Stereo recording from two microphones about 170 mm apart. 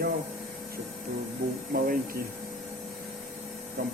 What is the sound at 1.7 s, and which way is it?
Speech, 60° right (ahead or behind).